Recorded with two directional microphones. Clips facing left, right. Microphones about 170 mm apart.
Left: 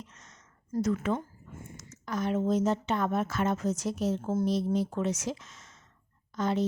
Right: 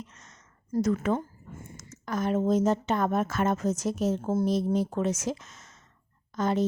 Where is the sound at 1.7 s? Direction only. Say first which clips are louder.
Right 2 dB; 45° right (ahead or behind).